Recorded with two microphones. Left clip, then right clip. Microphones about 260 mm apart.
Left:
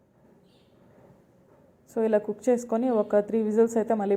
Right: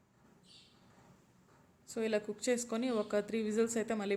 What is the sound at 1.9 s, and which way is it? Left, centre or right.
A woman's voice, centre.